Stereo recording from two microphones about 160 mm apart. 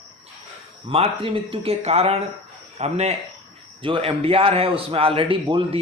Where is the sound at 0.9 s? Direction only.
35° right (ahead or behind).